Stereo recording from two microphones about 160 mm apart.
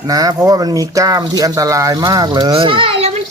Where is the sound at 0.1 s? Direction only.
25° right (ahead or behind).